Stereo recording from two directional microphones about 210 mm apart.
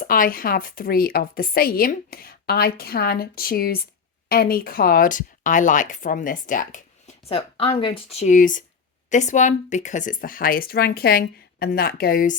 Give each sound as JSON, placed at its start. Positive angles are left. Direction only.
{"t": 0.0, "sound": "speech", "side_deg": 40}
{"t": 7.3, "sound": "a woman's voice", "side_deg": 25}